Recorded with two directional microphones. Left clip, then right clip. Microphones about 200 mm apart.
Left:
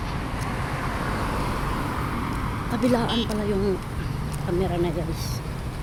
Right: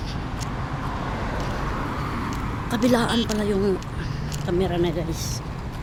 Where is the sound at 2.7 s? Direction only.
10° right (ahead or behind).